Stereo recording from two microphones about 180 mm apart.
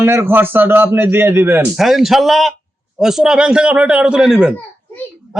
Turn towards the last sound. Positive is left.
turn(degrees=-5)  # may be behind; listen again after turning